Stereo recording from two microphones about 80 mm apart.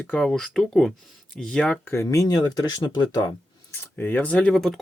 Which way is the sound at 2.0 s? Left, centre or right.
Left.